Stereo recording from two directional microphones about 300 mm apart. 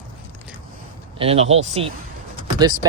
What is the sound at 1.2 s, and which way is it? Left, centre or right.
Speech, centre.